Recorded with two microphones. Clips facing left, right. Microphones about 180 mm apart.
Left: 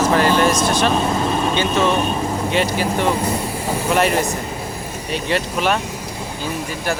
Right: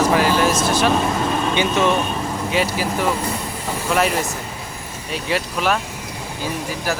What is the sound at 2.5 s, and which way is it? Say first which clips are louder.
Speech: left 1 dB; 5° right (ahead or behind).